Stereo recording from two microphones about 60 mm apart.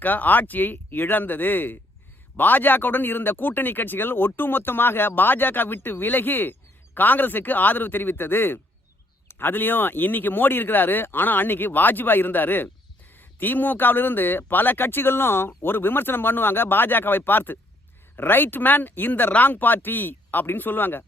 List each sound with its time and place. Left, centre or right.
0.0 s speech: left